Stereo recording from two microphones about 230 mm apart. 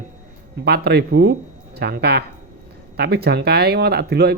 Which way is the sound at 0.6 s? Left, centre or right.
Right.